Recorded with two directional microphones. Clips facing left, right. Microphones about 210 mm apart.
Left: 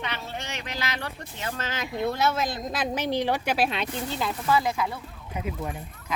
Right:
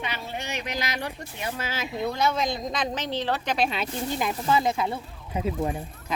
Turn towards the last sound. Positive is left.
turn(degrees=-30)  # may be behind; listen again after turning